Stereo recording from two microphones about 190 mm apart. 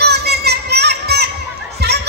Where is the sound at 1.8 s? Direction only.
60° right (ahead or behind).